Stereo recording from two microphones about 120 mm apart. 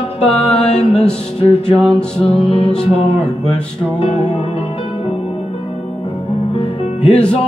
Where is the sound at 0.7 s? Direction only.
5° left (ahead or behind).